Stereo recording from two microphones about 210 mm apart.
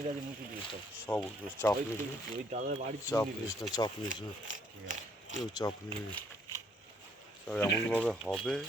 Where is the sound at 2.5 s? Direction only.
35° right (ahead or behind).